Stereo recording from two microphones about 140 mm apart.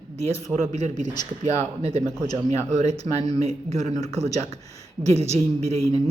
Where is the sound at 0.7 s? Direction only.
60° right (ahead or behind).